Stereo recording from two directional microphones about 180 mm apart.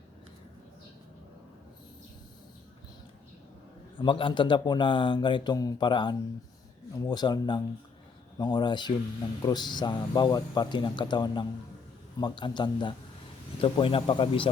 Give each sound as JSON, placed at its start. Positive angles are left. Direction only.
{"t": 3.9, "sound": "speech", "side_deg": 30}